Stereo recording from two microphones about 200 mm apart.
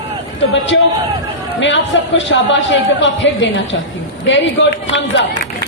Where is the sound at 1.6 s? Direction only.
65° left (ahead or behind).